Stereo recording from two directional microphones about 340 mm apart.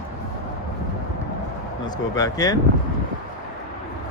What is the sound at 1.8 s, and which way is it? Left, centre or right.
Speech, centre.